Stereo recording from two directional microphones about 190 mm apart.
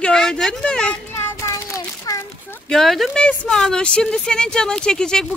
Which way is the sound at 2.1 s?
20° left (ahead or behind).